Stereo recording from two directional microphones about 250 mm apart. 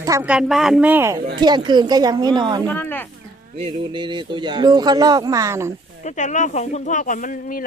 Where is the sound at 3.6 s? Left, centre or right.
Centre.